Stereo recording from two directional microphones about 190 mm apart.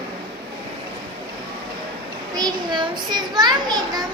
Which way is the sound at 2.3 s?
20° right (ahead or behind).